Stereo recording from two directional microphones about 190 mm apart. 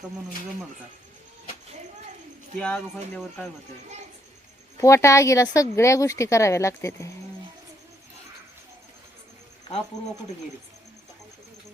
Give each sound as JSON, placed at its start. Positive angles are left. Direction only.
{"t": 2.6, "sound": "speech", "side_deg": 5}
{"t": 4.8, "sound": "speech", "side_deg": 15}